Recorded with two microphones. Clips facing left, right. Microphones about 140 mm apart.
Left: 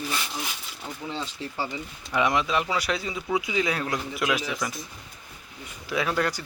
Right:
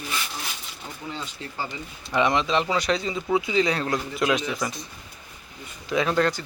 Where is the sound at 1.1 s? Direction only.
25° left (ahead or behind).